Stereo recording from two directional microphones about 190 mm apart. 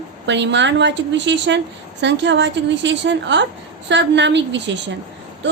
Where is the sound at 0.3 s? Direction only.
70° right (ahead or behind).